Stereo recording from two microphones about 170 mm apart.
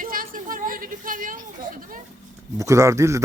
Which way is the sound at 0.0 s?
55° right (ahead or behind).